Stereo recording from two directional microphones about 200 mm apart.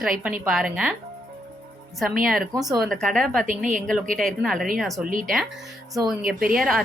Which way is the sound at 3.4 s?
40° right (ahead or behind).